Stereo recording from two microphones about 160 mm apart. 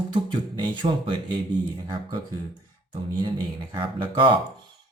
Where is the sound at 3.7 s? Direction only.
30° right (ahead or behind).